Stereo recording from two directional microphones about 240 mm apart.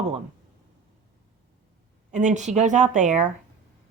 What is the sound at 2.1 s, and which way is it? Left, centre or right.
Speech, right.